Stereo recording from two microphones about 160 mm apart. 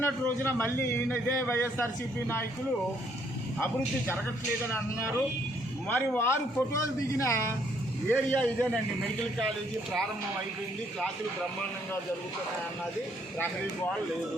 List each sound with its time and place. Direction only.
0.0 s a man's voice: 15° left (ahead or behind)
3.6 s a man's voice: 15° left (ahead or behind)